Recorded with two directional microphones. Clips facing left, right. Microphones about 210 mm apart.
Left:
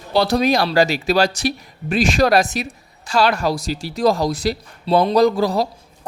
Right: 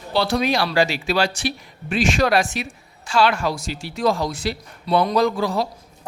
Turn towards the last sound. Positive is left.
turn(degrees=35)  # may be behind; listen again after turning